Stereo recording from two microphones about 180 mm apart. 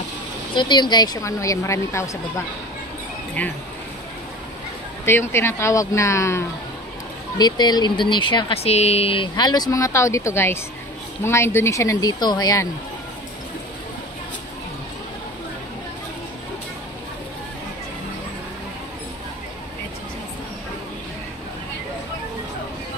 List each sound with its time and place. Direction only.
0.6 s speech: 25° left (ahead or behind); by 3.5 s 10° left (ahead or behind)
5.0 s speech: 15° left (ahead or behind)